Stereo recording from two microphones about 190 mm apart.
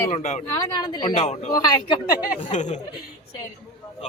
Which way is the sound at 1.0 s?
35° left (ahead or behind).